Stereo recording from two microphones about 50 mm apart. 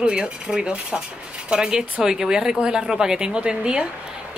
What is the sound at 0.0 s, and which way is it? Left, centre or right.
A child's voice, centre.